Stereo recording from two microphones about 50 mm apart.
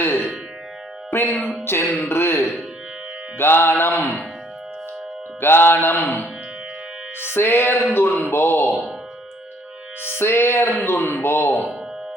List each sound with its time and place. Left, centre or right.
1.1 s music: left
2.0 s speech: left
3.3 s music: left
5.4 s music: left
7.3 s music: left
7.9 s music: left
10.2 s music: left